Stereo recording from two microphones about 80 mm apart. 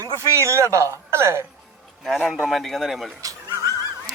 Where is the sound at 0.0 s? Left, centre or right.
Right.